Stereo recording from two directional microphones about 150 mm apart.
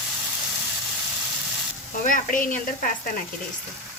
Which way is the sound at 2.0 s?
65° left (ahead or behind).